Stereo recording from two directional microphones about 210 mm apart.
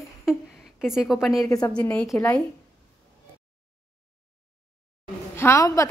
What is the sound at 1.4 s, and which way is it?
Speech, 15° left (ahead or behind).